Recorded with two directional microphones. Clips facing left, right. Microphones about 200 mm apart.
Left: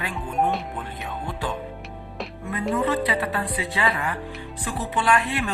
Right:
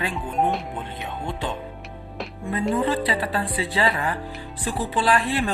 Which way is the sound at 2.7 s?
30° right (ahead or behind).